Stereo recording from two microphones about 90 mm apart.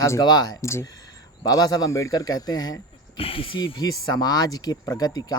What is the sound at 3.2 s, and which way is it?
Speech, 85° left.